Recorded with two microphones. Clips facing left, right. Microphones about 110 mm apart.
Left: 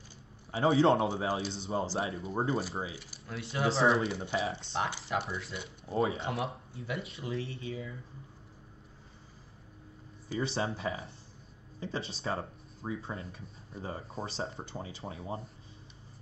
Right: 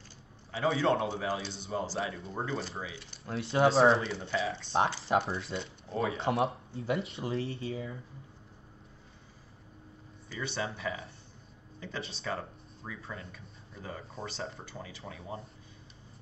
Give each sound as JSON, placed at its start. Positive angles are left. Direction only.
{"t": 0.5, "sound": "a man's voice", "side_deg": 30}
{"t": 3.3, "sound": "speech", "side_deg": -30}
{"t": 4.1, "sound": "a man's voice", "side_deg": 25}
{"t": 5.0, "sound": "speech", "side_deg": -30}
{"t": 10.4, "sound": "a man's voice", "side_deg": 30}